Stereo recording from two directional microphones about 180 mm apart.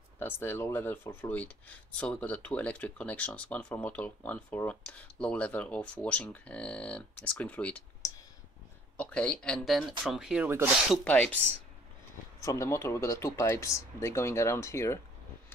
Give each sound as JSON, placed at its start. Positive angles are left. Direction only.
{"t": 0.2, "sound": "speech", "side_deg": 10}
{"t": 8.9, "sound": "speech", "side_deg": 5}
{"t": 11.1, "sound": "speech", "side_deg": 5}
{"t": 12.4, "sound": "speech", "side_deg": 15}